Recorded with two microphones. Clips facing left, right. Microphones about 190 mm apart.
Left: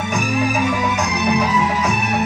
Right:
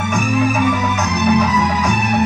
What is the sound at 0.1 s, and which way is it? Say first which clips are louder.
Music: right 3 dB; 35° left (ahead or behind).